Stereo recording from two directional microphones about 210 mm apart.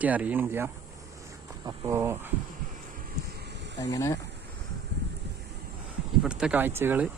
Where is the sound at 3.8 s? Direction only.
15° left (ahead or behind).